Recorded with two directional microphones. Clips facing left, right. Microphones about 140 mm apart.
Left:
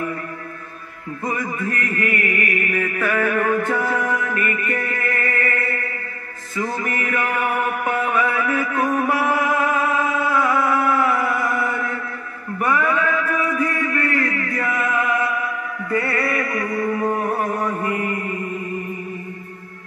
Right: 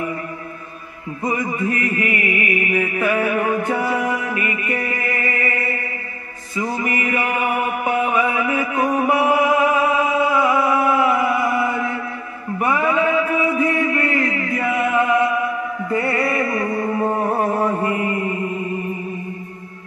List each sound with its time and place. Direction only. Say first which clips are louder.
1.2 s music: right 3 dB; 20° right (ahead or behind)
6.5 s mantra: right 2 dB; 15° right (ahead or behind)
15.9 s music: right 1 dB; 25° right (ahead or behind)